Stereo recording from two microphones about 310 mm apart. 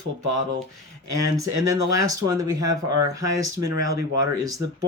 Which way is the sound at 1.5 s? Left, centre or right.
Right.